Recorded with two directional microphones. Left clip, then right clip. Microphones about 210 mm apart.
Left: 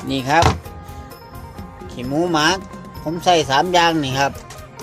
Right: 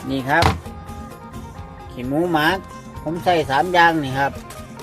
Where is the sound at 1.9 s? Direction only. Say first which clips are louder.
Left 1 dB; 10° left (ahead or behind).